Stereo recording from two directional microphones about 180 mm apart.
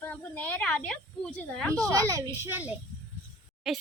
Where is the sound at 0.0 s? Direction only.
10° left (ahead or behind).